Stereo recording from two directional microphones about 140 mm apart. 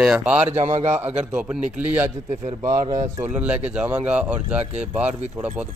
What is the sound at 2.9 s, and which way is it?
Speech, 25° right (ahead or behind).